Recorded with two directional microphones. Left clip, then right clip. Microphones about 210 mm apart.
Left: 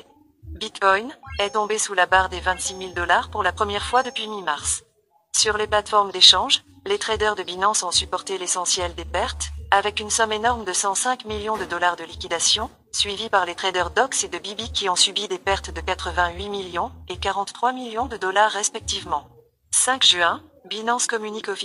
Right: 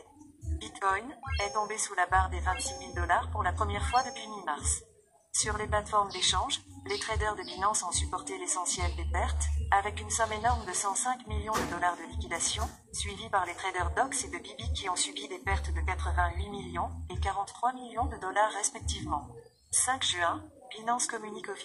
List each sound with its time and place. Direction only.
0.6 s speech: 35° left (ahead or behind)